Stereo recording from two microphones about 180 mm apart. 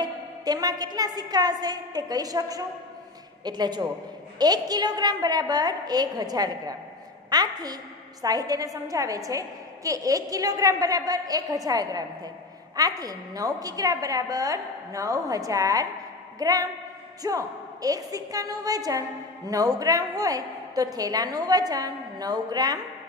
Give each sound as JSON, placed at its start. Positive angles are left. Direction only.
{"t": 0.0, "sound": "a woman's voice", "side_deg": -20}